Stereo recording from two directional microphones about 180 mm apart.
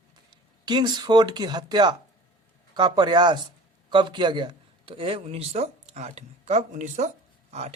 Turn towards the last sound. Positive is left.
turn(degrees=-35)  # may be behind; listen again after turning